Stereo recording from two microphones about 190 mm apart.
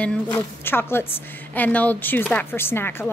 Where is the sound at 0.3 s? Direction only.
10° left (ahead or behind).